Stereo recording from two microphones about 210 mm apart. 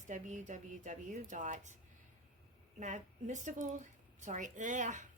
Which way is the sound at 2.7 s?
35° right (ahead or behind).